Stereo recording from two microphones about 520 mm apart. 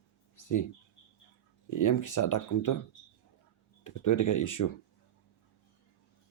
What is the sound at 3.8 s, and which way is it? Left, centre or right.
Speech, left.